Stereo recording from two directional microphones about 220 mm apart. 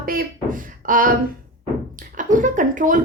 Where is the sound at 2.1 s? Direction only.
35° right (ahead or behind).